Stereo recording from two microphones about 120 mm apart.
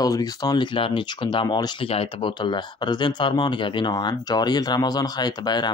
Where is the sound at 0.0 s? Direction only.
30° left (ahead or behind).